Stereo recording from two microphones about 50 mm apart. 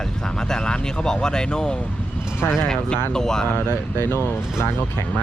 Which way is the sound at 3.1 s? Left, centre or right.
Centre.